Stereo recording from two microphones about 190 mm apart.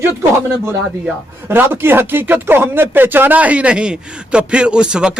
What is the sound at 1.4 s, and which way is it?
Speech, 10° right (ahead or behind).